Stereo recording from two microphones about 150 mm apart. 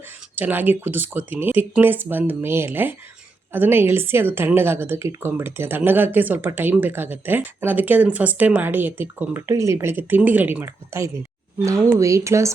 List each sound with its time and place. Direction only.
0.3 s a woman's voice: 10° right (ahead or behind)